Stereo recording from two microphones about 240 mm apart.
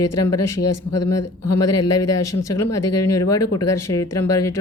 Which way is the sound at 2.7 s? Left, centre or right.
Left.